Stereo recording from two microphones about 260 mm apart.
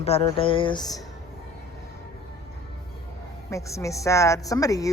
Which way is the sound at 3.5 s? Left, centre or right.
Centre.